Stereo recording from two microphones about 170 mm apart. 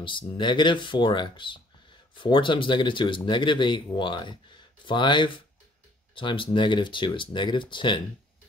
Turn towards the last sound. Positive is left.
turn(degrees=30)  # may be behind; listen again after turning